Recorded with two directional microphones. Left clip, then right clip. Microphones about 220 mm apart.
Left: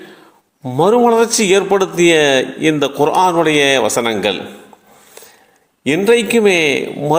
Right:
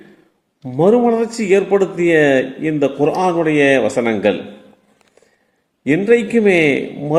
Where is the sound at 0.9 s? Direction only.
10° left (ahead or behind).